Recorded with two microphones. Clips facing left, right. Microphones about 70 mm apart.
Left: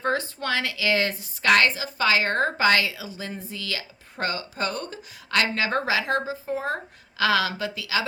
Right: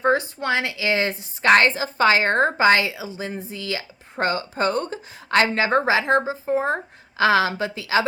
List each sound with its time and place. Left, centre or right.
0.0 s a woman's voice: centre